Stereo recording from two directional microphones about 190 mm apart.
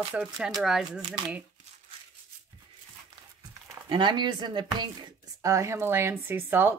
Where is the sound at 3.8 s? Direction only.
25° right (ahead or behind).